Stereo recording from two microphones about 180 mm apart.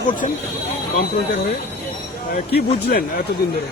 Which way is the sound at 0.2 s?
45° left (ahead or behind).